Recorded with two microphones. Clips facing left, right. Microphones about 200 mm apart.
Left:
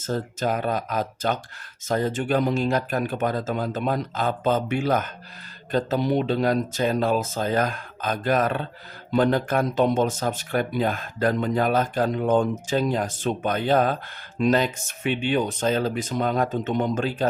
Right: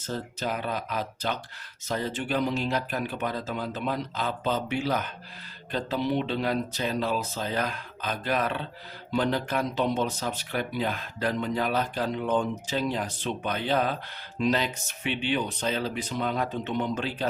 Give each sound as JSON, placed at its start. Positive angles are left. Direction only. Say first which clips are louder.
{"t": 0.0, "sound": "speech", "louder": "left 6 dB", "side_deg": 45}